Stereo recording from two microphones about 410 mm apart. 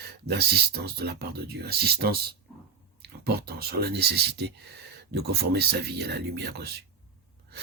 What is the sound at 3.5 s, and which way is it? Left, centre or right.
Speech, right.